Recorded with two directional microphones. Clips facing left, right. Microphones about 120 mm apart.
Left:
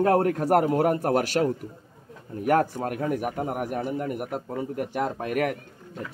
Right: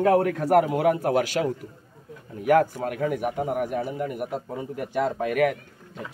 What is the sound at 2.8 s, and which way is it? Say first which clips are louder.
A man's voice: right 1 dB; 45° left (ahead or behind).